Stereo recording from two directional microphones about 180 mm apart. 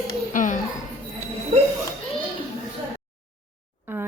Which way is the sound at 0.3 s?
45° left (ahead or behind).